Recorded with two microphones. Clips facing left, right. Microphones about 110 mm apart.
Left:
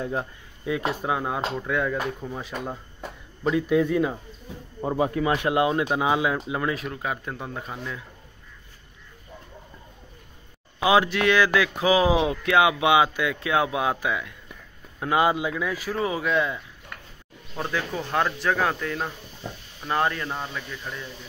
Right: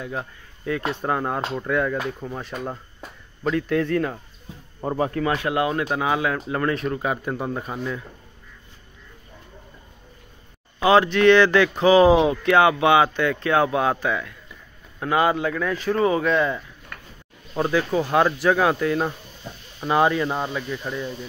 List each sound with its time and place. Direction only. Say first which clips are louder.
0.0 s speech: left 2 dB; 30° left (ahead or behind)
0.7 s speech: right 1 dB; 10° left (ahead or behind)
3.4 s speech: left 1 dB; 10° left (ahead or behind); by 8.0 s 5° right (ahead or behind)
10.9 s speech: right 5 dB; 5° left (ahead or behind); by 21.1 s 15° right (ahead or behind)